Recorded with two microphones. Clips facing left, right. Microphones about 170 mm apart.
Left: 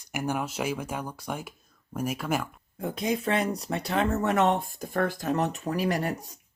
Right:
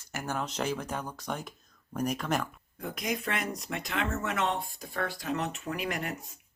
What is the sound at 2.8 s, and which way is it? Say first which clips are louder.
Speech: left 5 dB; 25° left (ahead or behind).